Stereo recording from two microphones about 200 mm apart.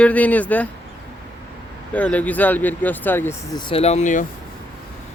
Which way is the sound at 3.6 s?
30° left (ahead or behind).